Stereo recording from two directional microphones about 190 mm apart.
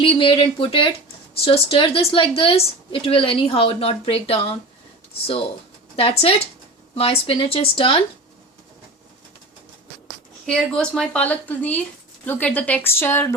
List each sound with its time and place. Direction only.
0.0 s a woman's voice: 25° left (ahead or behind)
6.0 s a woman's voice: 30° left (ahead or behind)
10.4 s a woman's voice: 5° left (ahead or behind)